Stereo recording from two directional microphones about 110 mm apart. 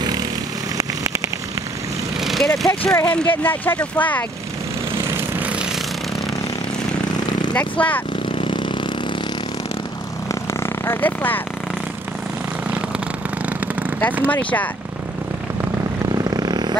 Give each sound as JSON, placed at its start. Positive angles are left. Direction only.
{"t": 2.1, "sound": "vehicle", "side_deg": 0}
{"t": 3.4, "sound": "speech", "side_deg": 15}
{"t": 5.1, "sound": "vehicle", "side_deg": -20}
{"t": 7.5, "sound": "speech", "side_deg": 15}
{"t": 8.4, "sound": "vehicle", "side_deg": 50}
{"t": 10.2, "sound": "vehicle", "side_deg": 25}
{"t": 14.2, "sound": "speech", "side_deg": 15}
{"t": 16.1, "sound": "vehicle", "side_deg": -35}